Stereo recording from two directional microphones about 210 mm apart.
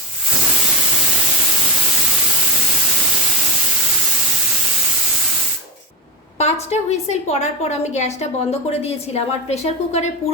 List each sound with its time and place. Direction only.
6.4 s a woman's voice: 30° left (ahead or behind)